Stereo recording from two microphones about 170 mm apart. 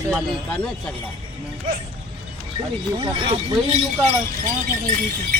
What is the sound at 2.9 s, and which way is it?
Speech, 30° right (ahead or behind).